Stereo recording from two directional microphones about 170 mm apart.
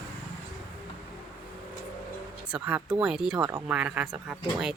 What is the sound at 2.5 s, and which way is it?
Speech, 5° right (ahead or behind).